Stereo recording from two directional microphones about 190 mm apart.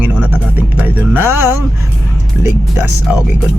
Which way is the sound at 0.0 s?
10° right (ahead or behind).